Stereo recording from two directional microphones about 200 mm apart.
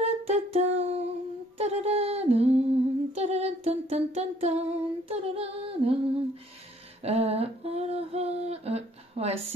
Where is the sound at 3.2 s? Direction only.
30° right (ahead or behind).